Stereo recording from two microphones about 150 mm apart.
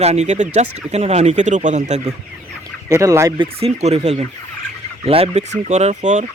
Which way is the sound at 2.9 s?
20° right (ahead or behind).